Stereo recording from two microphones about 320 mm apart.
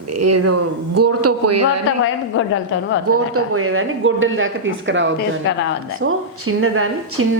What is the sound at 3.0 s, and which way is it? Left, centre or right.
Speech, right.